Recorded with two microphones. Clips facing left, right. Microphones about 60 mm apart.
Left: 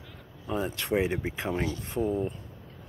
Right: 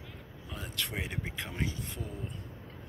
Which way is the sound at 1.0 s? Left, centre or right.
Centre.